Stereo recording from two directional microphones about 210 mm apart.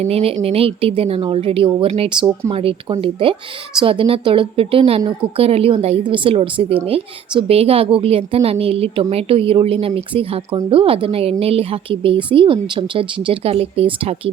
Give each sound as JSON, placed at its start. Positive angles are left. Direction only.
{"t": 0.0, "sound": "a woman's voice", "side_deg": -30}